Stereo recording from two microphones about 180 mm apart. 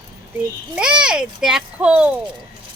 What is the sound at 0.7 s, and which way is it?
A child's voice, 5° right (ahead or behind).